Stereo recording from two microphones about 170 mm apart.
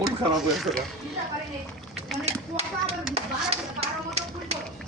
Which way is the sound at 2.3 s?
40° right (ahead or behind).